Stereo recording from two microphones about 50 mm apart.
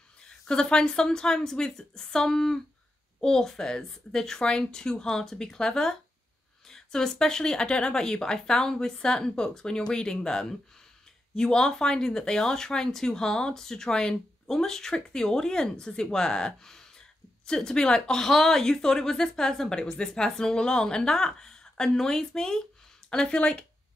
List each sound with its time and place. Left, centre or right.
0.3 s speech: centre